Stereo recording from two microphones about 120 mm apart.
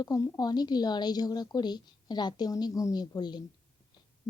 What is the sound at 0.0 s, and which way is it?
A woman's voice, 30° left (ahead or behind).